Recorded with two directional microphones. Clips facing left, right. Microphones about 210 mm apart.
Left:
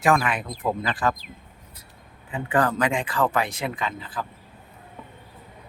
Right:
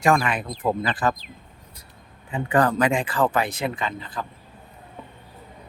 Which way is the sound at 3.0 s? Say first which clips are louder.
Right 2 dB; 25° right (ahead or behind).